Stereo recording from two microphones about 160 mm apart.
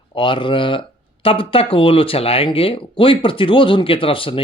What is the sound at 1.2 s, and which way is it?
Speech, 35° left (ahead or behind).